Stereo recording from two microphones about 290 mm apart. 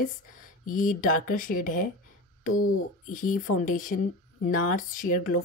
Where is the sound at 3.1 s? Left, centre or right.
Left.